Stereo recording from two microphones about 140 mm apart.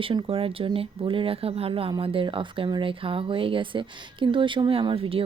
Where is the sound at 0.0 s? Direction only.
40° right (ahead or behind).